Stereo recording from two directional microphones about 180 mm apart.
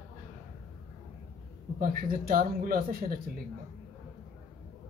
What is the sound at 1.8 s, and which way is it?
Speech, 55° right (ahead or behind).